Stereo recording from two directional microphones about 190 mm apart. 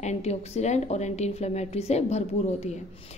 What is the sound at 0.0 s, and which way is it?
A woman's voice, 35° left (ahead or behind).